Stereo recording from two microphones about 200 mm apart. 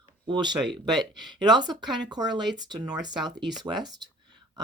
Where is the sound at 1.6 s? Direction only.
20° right (ahead or behind).